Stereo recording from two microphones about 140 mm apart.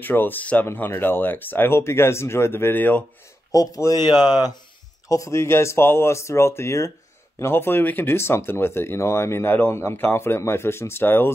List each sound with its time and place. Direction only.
0.0 s speech: 15° left (ahead or behind)
3.5 s speech: 25° left (ahead or behind)